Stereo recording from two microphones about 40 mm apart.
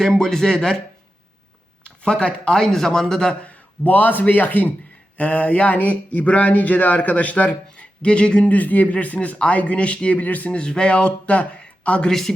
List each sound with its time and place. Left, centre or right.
0.2 s speech: centre
2.0 s speech: left
3.8 s a man's voice: left
5.1 s speech: left
8.0 s speech: left
8.4 s speech: left
10.2 s a man's voice: left
10.5 s speech: left